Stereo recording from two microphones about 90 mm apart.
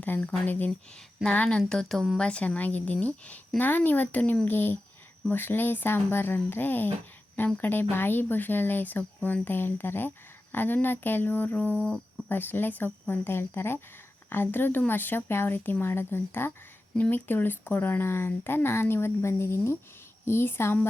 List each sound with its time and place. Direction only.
0.0 s a woman's voice: 20° left (ahead or behind)